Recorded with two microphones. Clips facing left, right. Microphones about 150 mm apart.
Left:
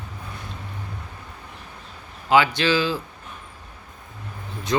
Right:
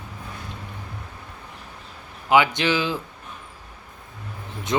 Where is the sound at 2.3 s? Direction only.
20° right (ahead or behind).